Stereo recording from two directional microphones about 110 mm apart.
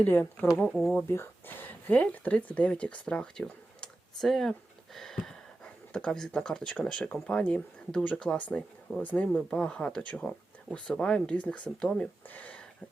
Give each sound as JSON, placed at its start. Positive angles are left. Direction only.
{"t": 0.0, "sound": "speech", "side_deg": 15}
{"t": 0.7, "sound": "speech", "side_deg": 0}
{"t": 1.0, "sound": "speech", "side_deg": 20}